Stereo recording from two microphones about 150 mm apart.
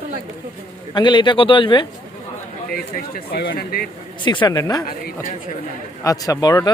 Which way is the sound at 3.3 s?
85° left.